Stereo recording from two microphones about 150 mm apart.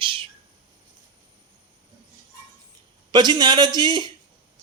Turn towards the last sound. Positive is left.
turn(degrees=-30)  # may be behind; listen again after turning